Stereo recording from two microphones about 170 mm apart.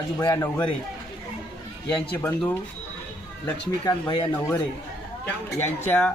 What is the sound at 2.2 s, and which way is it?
Speech, 10° left (ahead or behind).